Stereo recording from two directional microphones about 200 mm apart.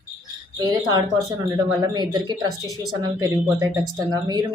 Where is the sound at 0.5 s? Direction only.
20° right (ahead or behind).